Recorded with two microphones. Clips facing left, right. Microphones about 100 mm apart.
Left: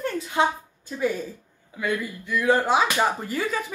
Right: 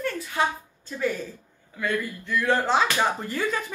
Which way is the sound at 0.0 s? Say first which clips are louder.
Left 3 dB; 20° left (ahead or behind).